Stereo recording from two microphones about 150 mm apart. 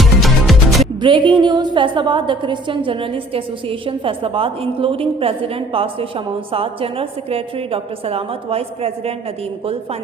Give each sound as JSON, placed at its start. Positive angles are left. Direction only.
{"t": 0.0, "sound": "music", "side_deg": 0}
{"t": 0.9, "sound": "a woman's voice", "side_deg": -30}